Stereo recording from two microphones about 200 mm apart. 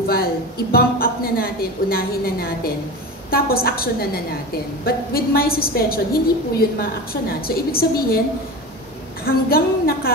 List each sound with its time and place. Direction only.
0.0 s a woman's voice: 50° left (ahead or behind)
9.2 s a woman's voice: 50° left (ahead or behind)